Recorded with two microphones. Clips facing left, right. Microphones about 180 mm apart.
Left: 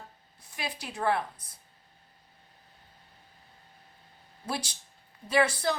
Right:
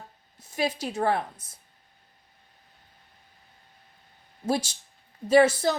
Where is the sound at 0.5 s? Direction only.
40° right (ahead or behind).